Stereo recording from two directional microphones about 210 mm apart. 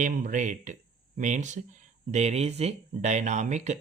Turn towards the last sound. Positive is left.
turn(degrees=-35)  # may be behind; listen again after turning